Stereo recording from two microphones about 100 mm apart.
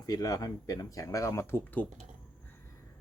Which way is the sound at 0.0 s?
35° left (ahead or behind).